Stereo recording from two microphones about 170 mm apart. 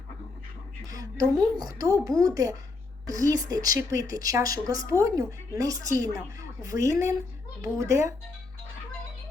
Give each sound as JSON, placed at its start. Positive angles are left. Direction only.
{"t": 0.9, "sound": "speech", "side_deg": -20}